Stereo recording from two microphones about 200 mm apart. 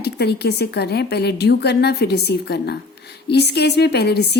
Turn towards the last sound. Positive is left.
turn(degrees=55)  # may be behind; listen again after turning